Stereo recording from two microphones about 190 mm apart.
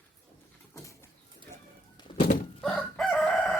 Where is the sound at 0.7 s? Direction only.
15° left (ahead or behind).